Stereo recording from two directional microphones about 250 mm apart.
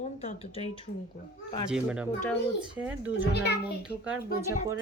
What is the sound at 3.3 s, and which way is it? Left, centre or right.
Speech, left.